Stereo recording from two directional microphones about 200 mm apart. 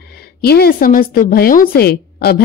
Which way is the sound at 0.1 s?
50° left (ahead or behind).